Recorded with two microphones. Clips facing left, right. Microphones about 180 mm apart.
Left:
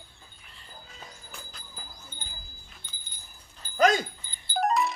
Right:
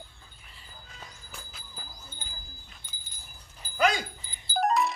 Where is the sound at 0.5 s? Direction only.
Centre (ahead or behind).